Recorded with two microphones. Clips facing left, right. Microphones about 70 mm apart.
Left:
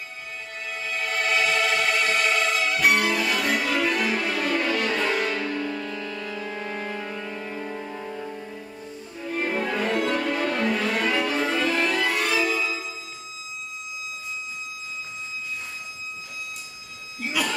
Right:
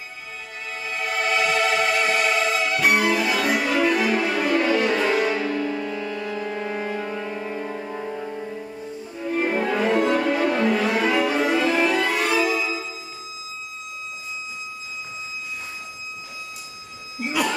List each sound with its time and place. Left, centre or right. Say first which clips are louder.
0.7 s music: right 1 dB; centre
17.2 s buzzer: right 3 dB; centre